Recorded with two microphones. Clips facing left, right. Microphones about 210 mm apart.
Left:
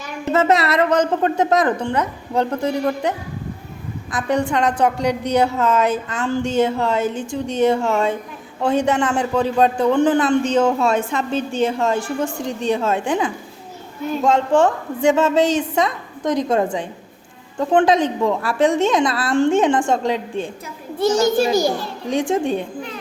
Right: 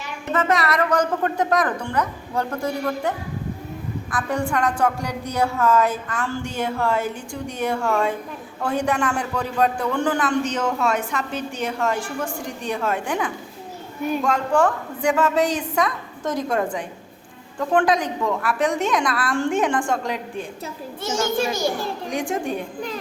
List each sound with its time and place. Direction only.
0.3 s a man's voice: 25° left (ahead or behind)
21.0 s a child's voice: 35° left (ahead or behind)
22.1 s a man's voice: 25° left (ahead or behind)